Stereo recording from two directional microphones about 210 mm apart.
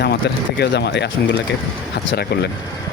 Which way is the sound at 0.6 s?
55° left (ahead or behind).